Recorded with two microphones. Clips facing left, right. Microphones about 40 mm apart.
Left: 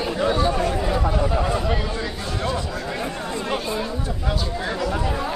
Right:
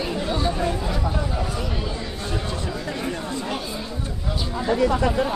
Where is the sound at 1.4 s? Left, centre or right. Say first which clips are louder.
Left 5 dB; left.